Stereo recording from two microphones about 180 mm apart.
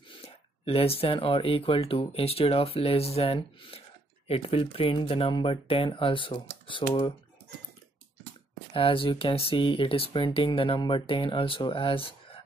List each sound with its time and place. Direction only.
0.2 s speech: 30° left (ahead or behind)
8.7 s speech: 30° left (ahead or behind)